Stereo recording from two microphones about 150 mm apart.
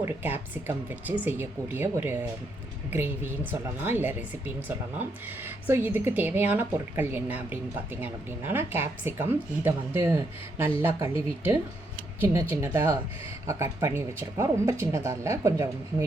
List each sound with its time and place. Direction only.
0.0 s speech: 15° right (ahead or behind)
12.2 s speech: 15° right (ahead or behind)